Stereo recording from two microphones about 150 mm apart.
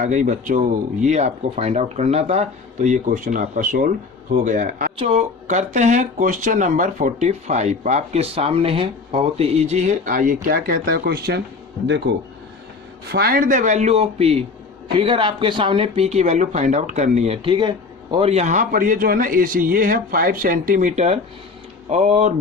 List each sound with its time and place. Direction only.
0.0 s a man's voice: 55° right (ahead or behind)
4.9 s speech: 50° right (ahead or behind); by 11.4 s 90° right
13.1 s speech: 90° right; by 18.3 s 30° right (ahead or behind)
18.3 s a man's voice: 50° right (ahead or behind)